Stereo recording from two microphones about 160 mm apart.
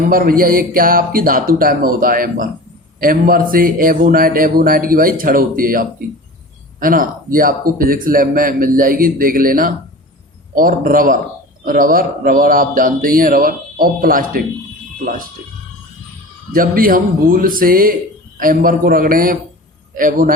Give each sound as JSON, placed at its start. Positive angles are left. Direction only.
{"t": 0.1, "sound": "a man's voice", "side_deg": -65}
{"t": 16.5, "sound": "a man's voice", "side_deg": -65}